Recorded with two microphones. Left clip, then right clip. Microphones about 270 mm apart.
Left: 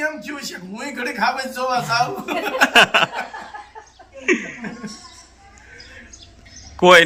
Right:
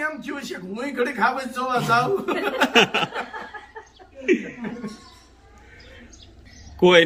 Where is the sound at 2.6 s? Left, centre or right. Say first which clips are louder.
Left 6 dB; centre.